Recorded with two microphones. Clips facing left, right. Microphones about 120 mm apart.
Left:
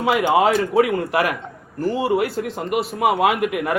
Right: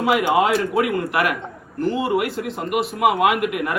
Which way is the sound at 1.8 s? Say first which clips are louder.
Left 1 dB; 30° left (ahead or behind).